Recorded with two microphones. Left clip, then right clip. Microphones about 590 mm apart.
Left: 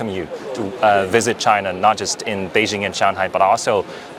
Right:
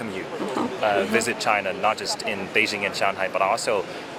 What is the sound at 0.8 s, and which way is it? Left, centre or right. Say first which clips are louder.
Speech: left 8 dB; left.